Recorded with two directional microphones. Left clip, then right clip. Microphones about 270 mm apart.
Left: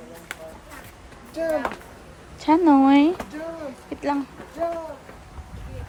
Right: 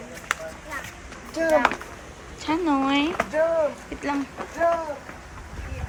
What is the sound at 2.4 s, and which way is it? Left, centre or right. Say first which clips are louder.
Speech: left 7 dB; left.